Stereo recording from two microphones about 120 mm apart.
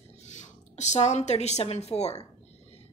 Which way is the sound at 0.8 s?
70° left (ahead or behind).